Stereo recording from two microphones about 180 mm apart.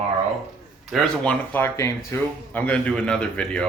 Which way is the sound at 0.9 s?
5° left (ahead or behind).